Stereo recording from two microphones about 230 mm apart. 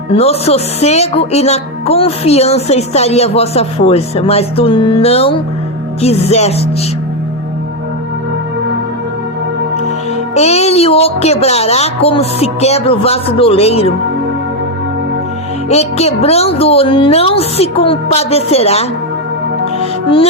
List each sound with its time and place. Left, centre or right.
0.1 s speech: left
10.3 s speech: left
15.7 s speech: left